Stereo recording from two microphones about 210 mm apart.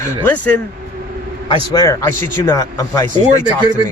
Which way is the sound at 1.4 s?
20° left (ahead or behind).